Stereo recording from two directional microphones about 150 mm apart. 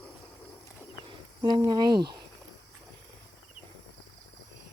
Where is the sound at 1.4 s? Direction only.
25° right (ahead or behind).